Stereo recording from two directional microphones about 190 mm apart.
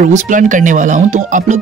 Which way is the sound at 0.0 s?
45° right (ahead or behind).